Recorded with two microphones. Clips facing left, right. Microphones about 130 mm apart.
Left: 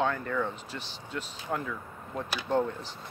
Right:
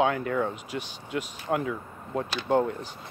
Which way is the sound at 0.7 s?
15° right (ahead or behind).